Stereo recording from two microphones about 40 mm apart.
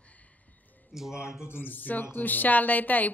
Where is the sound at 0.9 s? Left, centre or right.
Centre.